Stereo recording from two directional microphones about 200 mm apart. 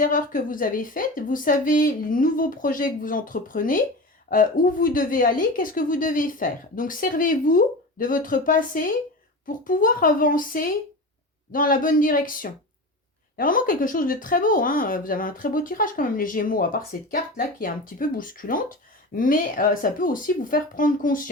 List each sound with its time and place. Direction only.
0.0 s speech: 45° left (ahead or behind)